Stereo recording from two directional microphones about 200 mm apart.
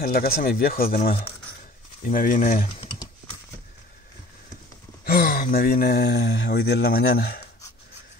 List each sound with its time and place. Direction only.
0.0 s speech: 45° left (ahead or behind)
5.0 s speech: 50° left (ahead or behind)